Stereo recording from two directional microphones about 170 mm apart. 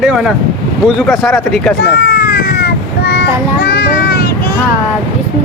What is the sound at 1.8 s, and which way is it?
Child singing, 75° left (ahead or behind).